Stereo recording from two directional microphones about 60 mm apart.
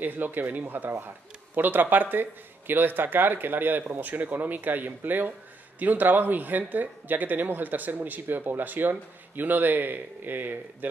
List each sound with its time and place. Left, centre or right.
0.0 s speech: right